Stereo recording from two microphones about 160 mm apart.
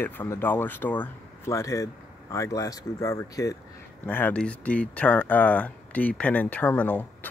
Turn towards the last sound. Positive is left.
turn(degrees=10)  # may be behind; listen again after turning